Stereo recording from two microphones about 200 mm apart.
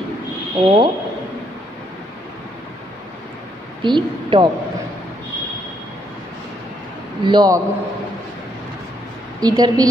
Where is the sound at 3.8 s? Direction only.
25° right (ahead or behind).